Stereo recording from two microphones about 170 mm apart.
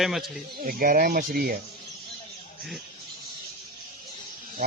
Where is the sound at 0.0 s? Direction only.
Centre (ahead or behind).